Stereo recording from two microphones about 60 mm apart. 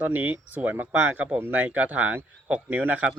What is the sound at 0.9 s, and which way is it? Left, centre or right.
Speech, right.